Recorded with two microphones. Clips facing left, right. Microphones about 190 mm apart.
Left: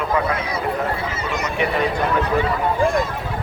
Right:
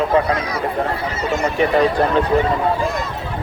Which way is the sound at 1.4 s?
35° right (ahead or behind).